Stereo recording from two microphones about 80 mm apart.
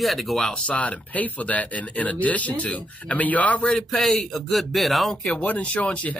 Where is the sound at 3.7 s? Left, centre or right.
Centre.